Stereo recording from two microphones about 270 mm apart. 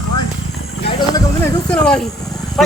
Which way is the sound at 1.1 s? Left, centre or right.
Centre.